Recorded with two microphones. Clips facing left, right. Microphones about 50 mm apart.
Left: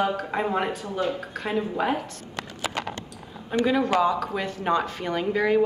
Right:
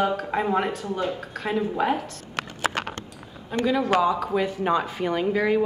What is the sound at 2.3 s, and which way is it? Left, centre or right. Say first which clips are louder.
Clip-clop: right 4 dB; right.